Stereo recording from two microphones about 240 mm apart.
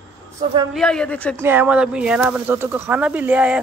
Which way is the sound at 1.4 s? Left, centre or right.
Centre.